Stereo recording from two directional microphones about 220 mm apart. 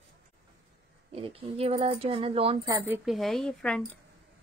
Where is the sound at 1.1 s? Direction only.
25° right (ahead or behind); by 3.8 s centre (ahead or behind).